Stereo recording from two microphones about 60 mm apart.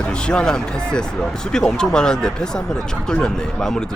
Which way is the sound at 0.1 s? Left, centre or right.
Centre.